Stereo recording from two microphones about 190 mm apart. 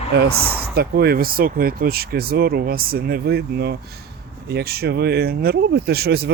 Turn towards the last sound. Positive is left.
turn(degrees=-55)  # may be behind; listen again after turning